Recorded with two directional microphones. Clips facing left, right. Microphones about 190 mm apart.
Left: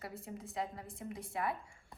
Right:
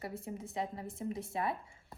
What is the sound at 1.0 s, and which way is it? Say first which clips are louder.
Speech: right 6 dB; 25° right (ahead or behind).